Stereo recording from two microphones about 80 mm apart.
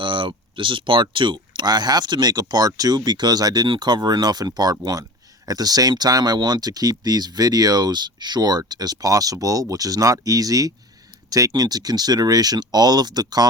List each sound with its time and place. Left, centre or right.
0.0 s speech: right